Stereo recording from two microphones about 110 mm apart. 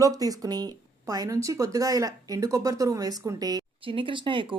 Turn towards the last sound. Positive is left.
turn(degrees=-50)  # may be behind; listen again after turning